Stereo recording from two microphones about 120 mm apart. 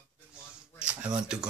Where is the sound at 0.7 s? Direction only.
10° right (ahead or behind).